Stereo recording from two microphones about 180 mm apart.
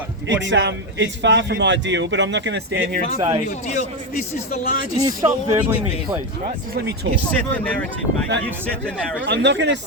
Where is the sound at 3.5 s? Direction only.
40° left (ahead or behind).